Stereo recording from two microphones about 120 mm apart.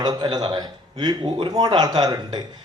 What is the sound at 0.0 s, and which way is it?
Speech, 35° right (ahead or behind).